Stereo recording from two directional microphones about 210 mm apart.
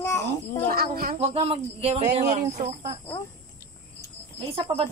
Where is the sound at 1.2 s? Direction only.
25° right (ahead or behind).